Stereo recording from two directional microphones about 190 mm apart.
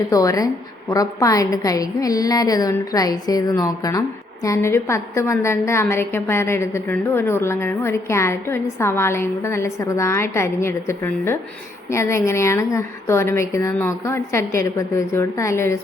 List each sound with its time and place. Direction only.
0.1 s a woman's voice: 20° left (ahead or behind)